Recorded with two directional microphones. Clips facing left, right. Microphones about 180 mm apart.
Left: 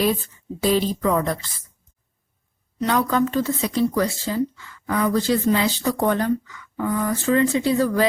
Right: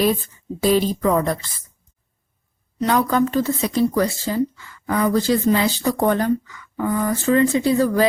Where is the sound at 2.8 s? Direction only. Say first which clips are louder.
Right 2 dB; 35° right (ahead or behind).